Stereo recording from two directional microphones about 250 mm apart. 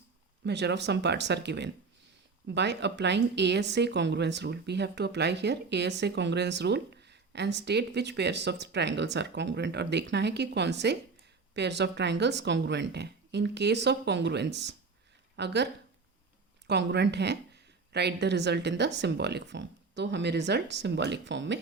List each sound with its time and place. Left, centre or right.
0.4 s speech: right